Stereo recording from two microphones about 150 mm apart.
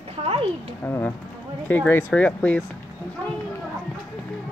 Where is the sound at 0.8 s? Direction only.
10° left (ahead or behind).